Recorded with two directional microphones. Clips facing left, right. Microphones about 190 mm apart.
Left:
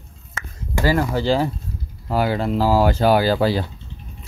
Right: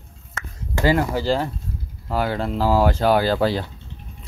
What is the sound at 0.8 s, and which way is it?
Speech, 20° right (ahead or behind).